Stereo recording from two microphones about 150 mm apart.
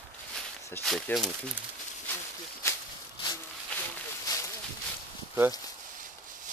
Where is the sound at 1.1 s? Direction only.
15° left (ahead or behind).